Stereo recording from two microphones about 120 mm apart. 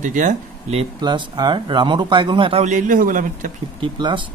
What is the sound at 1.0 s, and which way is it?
Speech, 40° right (ahead or behind).